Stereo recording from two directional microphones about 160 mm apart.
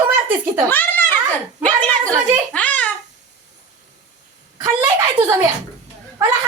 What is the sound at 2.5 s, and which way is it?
Speech, 10° left (ahead or behind).